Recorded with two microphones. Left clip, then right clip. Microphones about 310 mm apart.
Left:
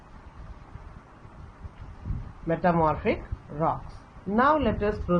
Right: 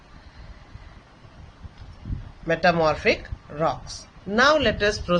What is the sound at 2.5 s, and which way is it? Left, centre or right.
Speech, right.